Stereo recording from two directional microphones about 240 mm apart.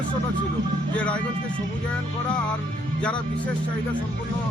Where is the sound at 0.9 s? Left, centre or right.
Centre.